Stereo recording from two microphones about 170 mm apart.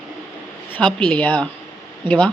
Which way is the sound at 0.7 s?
5° left (ahead or behind).